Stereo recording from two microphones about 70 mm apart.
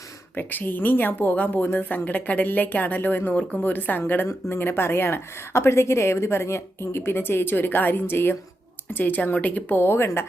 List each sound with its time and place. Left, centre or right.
0.3 s a woman's voice: left
9.8 s a woman's voice: left